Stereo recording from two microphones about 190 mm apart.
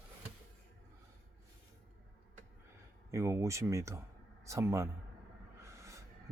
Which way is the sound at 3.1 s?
15° right (ahead or behind).